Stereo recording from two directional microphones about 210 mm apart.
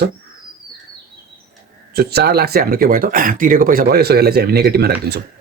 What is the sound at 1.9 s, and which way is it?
Speech, 50° right (ahead or behind).